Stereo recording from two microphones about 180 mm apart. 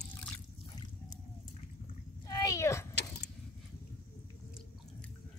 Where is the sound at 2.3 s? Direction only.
20° left (ahead or behind).